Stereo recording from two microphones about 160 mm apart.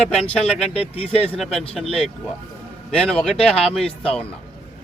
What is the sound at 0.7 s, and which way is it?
Speech, 40° left (ahead or behind).